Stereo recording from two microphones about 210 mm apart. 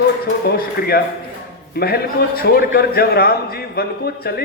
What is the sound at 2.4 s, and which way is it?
A man's voice, 45° left (ahead or behind).